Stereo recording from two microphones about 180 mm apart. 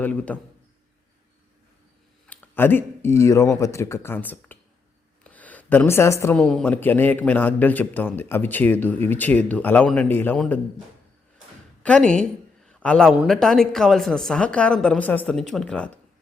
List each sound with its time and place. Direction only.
0.0 s speech: 10° left (ahead or behind)
2.2 s speech: 10° left (ahead or behind)
11.8 s speech: 5° left (ahead or behind)
12.6 s a sound: 5° left (ahead or behind)
13.1 s a woman's voice: centre (ahead or behind)